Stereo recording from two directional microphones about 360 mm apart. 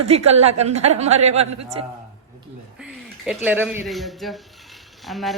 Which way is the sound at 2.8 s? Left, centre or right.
Centre.